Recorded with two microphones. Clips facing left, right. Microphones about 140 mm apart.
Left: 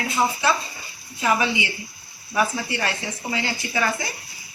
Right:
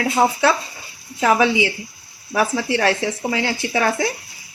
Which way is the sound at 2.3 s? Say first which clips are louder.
Right 4 dB; 90° right.